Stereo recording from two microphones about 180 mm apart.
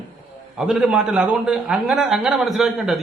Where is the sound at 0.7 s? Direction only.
5° right (ahead or behind).